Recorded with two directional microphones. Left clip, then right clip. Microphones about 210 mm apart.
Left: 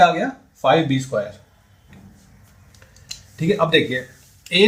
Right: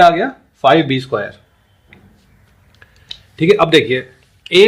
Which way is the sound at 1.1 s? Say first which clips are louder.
Right 3 dB; 45° right (ahead or behind).